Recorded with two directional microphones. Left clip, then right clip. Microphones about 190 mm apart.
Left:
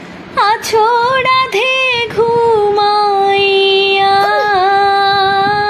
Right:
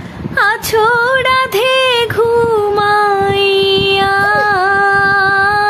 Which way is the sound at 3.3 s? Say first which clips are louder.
Left 1 dB; 75° right (ahead or behind).